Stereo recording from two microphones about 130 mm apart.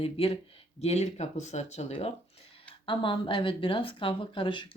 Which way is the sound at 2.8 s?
40° left (ahead or behind).